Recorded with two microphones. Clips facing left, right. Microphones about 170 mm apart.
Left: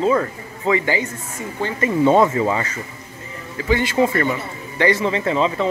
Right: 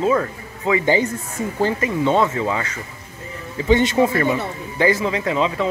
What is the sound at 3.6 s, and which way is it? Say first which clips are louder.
Speech: right 4 dB; 20° right (ahead or behind).